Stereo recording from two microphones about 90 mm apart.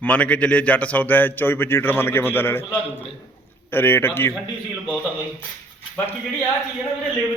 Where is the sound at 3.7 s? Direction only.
25° left (ahead or behind).